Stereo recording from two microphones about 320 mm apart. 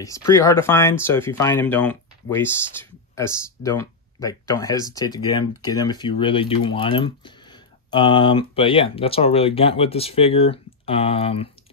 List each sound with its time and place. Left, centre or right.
0.0 s speech: centre